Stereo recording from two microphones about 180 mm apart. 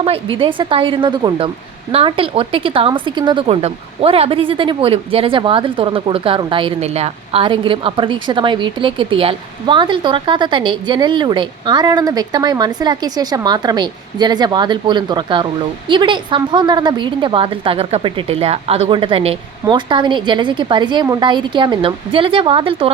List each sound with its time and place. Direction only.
0.0 s speech: 30° right (ahead or behind)